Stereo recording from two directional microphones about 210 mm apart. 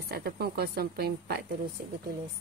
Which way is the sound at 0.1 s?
50° right (ahead or behind).